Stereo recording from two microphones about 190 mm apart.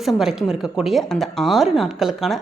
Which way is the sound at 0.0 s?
Centre (ahead or behind).